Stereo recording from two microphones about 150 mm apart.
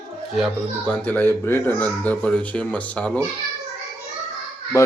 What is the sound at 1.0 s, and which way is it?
Speech, 15° left (ahead or behind).